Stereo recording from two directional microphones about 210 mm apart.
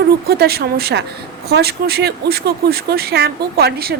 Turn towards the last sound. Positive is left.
turn(degrees=-50)  # may be behind; listen again after turning